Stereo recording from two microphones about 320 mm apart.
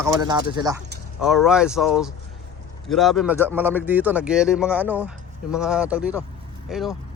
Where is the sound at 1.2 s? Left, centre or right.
Centre.